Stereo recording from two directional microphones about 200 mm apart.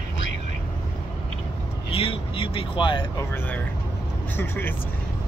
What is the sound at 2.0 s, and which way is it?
Speech, 25° left (ahead or behind).